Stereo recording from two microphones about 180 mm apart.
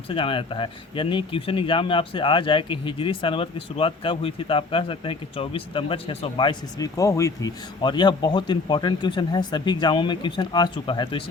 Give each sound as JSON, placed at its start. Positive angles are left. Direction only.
{"t": 0.1, "sound": "speech", "side_deg": 30}